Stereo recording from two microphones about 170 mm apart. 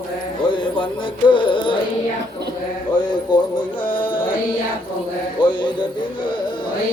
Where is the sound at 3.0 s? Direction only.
25° left (ahead or behind).